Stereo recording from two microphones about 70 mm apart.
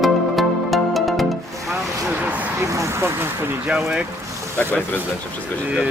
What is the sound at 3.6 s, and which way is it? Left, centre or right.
Speech, centre.